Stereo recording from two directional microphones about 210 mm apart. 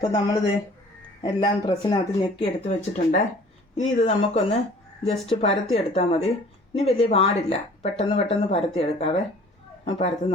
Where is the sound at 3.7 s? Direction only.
30° left (ahead or behind).